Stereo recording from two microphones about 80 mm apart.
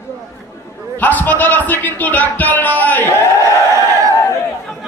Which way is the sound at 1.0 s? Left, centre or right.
Left.